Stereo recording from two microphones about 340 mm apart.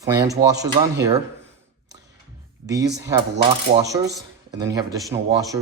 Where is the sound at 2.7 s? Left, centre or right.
Centre.